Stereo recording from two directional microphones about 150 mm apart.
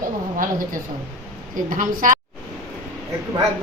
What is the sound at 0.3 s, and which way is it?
A woman's voice, 65° right (ahead or behind).